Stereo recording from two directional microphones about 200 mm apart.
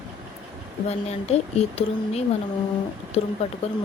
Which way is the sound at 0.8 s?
30° left (ahead or behind).